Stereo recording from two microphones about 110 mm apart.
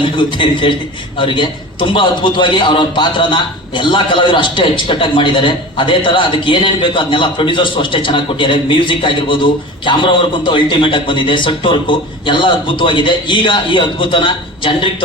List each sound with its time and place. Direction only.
0.0 s a man's voice: 50° left (ahead or behind)